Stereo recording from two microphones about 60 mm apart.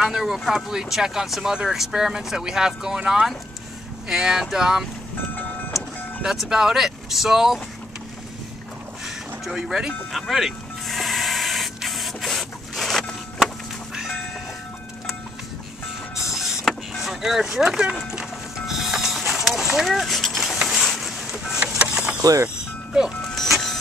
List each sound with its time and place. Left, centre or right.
0.0 s speech: centre
5.3 s vehicle: left
6.2 s speech: centre
9.0 s a sound: centre
10.1 s spray: centre
16.2 s a sound: centre
18.7 s music: centre
20.6 s a sound: centre
21.7 s vehicle: centre
23.2 s vehicle: centre